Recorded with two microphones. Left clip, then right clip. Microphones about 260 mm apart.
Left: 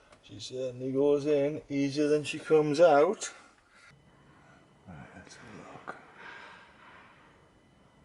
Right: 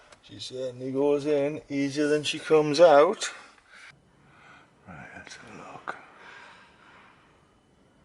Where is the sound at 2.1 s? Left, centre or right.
Centre.